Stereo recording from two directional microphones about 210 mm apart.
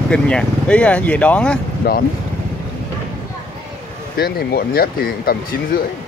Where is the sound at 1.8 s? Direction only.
45° left (ahead or behind).